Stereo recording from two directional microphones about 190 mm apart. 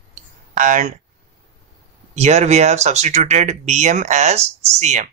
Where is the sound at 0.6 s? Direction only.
40° right (ahead or behind).